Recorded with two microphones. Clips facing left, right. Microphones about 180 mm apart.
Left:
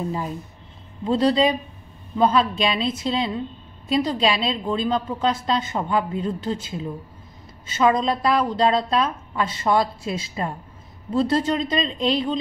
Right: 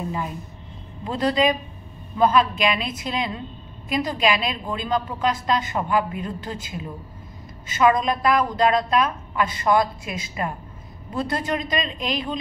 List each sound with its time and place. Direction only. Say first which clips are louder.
1.0 s a woman's voice: left 2 dB; 30° left (ahead or behind)
7.7 s a woman's voice: even; 25° left (ahead or behind)